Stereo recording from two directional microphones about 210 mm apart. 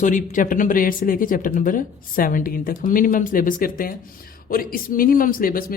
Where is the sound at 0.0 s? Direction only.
35° left (ahead or behind).